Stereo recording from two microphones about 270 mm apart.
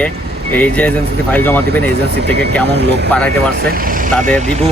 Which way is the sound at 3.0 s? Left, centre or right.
Centre.